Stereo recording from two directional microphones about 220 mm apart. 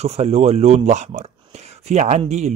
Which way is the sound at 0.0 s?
30° right (ahead or behind).